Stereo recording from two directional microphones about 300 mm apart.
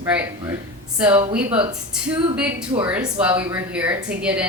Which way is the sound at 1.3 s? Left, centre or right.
Centre.